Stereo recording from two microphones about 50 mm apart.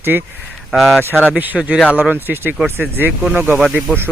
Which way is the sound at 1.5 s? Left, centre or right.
Centre.